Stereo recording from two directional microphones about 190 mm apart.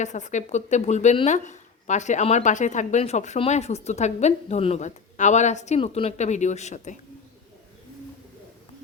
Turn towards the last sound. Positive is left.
turn(degrees=40)  # may be behind; listen again after turning